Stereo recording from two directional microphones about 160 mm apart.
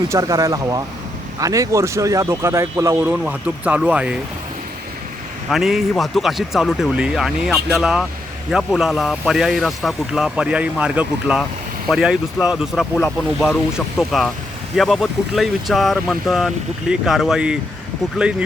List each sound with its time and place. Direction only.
0.1 s speech: 20° right (ahead or behind)
5.5 s speech: centre (ahead or behind)